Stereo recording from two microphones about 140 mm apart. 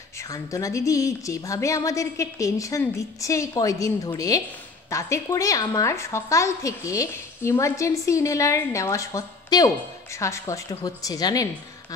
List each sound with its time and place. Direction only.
0.3 s a woman's voice: 25° left (ahead or behind)